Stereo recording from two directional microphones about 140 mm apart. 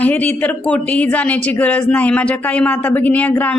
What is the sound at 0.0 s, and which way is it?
A woman's voice, 10° left (ahead or behind).